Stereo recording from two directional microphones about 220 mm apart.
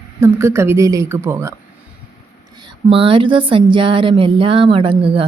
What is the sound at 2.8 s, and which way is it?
Speech, 25° right (ahead or behind).